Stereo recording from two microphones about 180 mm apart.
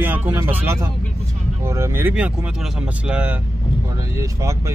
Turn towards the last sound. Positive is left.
turn(degrees=-15)  # may be behind; listen again after turning